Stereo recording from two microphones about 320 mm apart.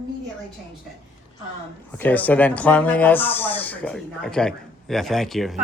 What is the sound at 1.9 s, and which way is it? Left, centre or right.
Speech, centre.